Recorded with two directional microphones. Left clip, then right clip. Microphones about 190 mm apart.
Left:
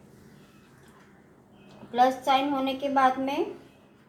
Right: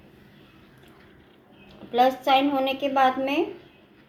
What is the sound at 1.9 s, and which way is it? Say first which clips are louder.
A woman's voice: right 3 dB; 25° right (ahead or behind).